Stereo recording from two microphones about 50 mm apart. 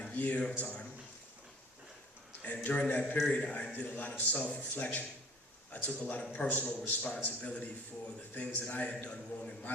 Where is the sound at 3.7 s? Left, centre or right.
Left.